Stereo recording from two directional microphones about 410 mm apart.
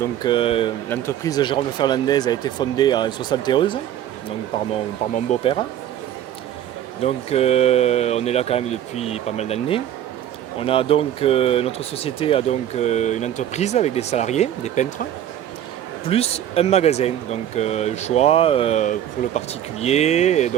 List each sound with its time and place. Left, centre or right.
0.2 s speech: centre
5.1 s speech: centre
7.0 s speech: centre
16.0 s speech: centre